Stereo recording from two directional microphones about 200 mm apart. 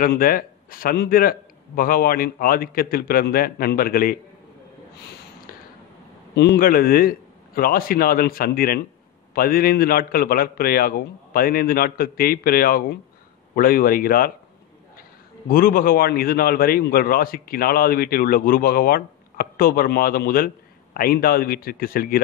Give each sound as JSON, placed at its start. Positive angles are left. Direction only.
{"t": 0.0, "sound": "a man's voice", "side_deg": 45}
{"t": 6.3, "sound": "a man's voice", "side_deg": 50}